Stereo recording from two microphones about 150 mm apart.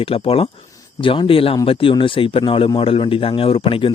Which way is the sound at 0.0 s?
40° left (ahead or behind).